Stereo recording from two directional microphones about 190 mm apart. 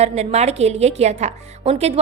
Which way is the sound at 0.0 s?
35° right (ahead or behind).